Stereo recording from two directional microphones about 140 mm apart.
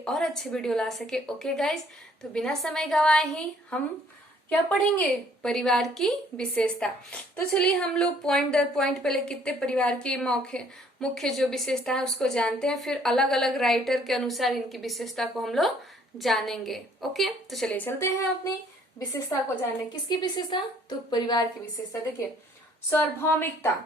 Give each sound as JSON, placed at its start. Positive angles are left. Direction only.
{"t": 0.0, "sound": "a woman's voice", "side_deg": 5}
{"t": 17.7, "sound": "a woman's voice", "side_deg": 15}
{"t": 22.9, "sound": "a woman's voice", "side_deg": 15}